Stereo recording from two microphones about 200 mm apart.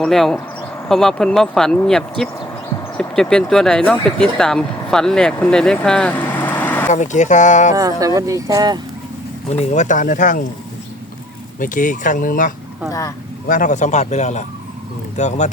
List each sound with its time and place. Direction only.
0.0 s speech: centre (ahead or behind)
6.9 s speech: 35° left (ahead or behind)
7.8 s speech: 15° right (ahead or behind)
9.5 s speech: 35° left (ahead or behind)
11.6 s speech: 40° left (ahead or behind)
12.9 s speech: 15° left (ahead or behind)
13.5 s speech: 40° left (ahead or behind)